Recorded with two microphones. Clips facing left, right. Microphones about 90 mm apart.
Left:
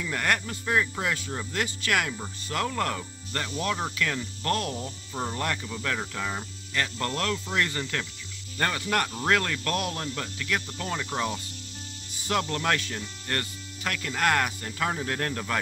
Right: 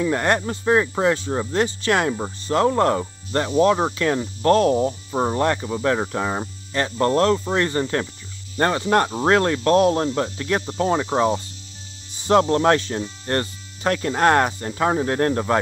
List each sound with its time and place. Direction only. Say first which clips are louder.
0.0 s speech: right 8 dB; 30° right (ahead or behind)